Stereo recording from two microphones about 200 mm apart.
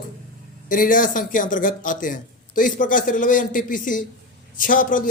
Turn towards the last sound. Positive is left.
turn(degrees=45)  # may be behind; listen again after turning